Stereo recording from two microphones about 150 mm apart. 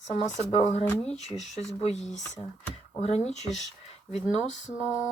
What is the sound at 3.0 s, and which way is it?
Speech, 45° left (ahead or behind).